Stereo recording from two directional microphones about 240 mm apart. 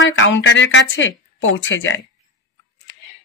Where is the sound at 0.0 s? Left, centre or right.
Left.